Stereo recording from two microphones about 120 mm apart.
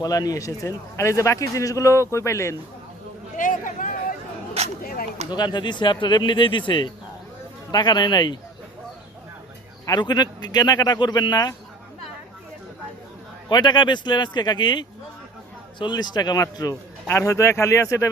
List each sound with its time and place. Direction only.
0.0 s a man's voice: 30° left (ahead or behind)
3.3 s a sound: 90° left
5.3 s speech: 40° left (ahead or behind)
9.8 s speech: 35° left (ahead or behind)
13.5 s a man's voice: 40° left (ahead or behind)